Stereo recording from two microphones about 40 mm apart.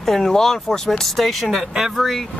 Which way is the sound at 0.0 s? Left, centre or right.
Centre.